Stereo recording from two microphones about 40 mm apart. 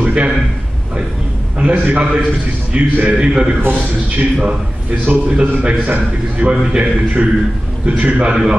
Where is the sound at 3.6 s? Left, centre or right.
Right.